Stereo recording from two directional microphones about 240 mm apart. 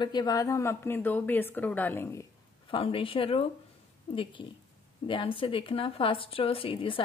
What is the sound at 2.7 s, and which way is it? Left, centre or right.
A woman's voice, left.